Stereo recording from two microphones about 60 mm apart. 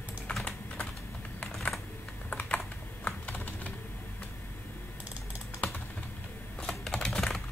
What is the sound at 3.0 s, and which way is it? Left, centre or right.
Typing, left.